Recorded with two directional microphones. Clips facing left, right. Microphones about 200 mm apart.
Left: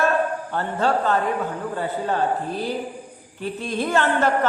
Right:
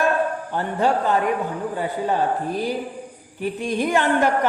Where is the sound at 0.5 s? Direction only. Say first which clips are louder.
Right 1 dB; 15° right (ahead or behind).